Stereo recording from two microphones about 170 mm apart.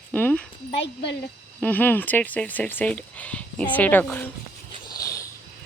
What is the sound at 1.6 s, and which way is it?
Speech, 10° left (ahead or behind).